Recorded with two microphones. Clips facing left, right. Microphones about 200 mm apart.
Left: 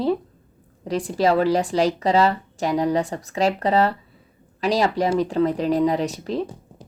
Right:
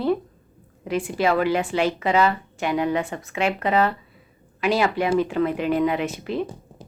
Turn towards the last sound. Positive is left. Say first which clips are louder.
# left 1 dB
turn(degrees=35)  # may be behind; listen again after turning